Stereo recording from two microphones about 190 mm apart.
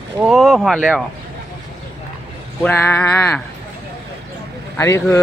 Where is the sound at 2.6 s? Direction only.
10° left (ahead or behind).